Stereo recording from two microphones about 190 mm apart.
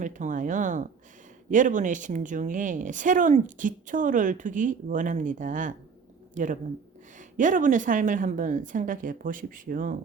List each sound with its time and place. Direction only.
0.0 s a woman's voice: 40° right (ahead or behind)